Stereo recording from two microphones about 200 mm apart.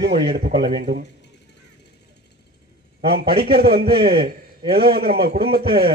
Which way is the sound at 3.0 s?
50° right (ahead or behind).